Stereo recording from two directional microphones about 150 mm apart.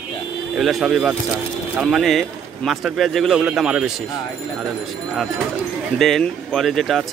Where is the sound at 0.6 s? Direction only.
Centre (ahead or behind).